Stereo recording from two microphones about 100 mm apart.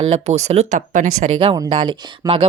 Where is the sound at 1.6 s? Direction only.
55° right (ahead or behind).